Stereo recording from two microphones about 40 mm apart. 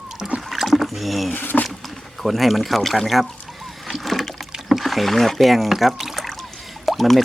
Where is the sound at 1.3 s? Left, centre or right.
Left.